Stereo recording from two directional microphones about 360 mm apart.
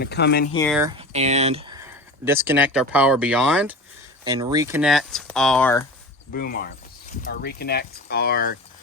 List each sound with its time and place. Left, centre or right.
0.0 s speech: left
0.5 s speech: centre
0.8 s speech: centre
6.3 s speech: left